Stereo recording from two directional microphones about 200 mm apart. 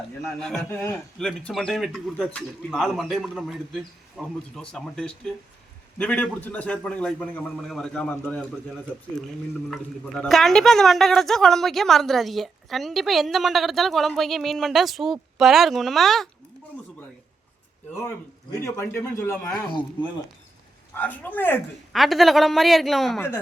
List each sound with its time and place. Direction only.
0.2 s a man's voice: centre (ahead or behind)
9.6 s speech: centre (ahead or behind)
18.6 s a man's voice: 15° left (ahead or behind)
19.6 s speech: 25° left (ahead or behind)
20.9 s speech: 10° left (ahead or behind)